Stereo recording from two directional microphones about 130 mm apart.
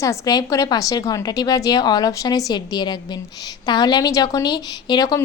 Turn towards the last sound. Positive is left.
turn(degrees=30)  # may be behind; listen again after turning